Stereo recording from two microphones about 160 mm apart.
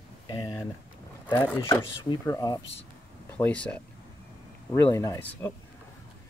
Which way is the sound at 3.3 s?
10° left (ahead or behind).